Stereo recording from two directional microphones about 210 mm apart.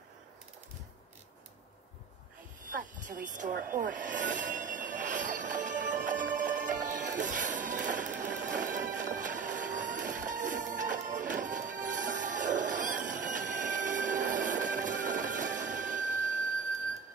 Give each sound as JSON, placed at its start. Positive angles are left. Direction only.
{"t": 2.8, "sound": "train", "side_deg": -40}